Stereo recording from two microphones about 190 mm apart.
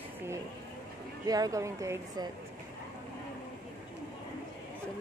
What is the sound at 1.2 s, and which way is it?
Speech, 20° right (ahead or behind).